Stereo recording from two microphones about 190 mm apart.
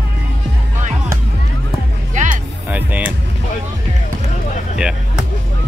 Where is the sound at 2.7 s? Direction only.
5° right (ahead or behind).